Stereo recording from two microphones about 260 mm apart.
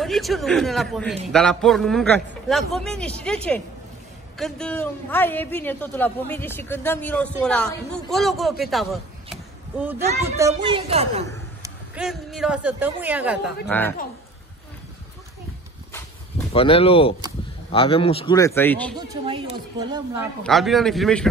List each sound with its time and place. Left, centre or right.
0.0 s a man's voice: centre; by 11.2 s right
11.6 s a woman's voice: centre
13.7 s a man's voice: centre
16.5 s a man's voice: left
18.9 s a woman's voice: centre
20.4 s a man's voice: centre